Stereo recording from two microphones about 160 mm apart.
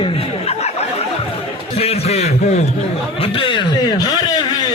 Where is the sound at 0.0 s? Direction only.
40° left (ahead or behind).